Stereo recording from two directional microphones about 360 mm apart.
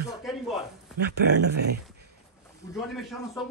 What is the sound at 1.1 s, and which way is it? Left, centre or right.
Speech, right.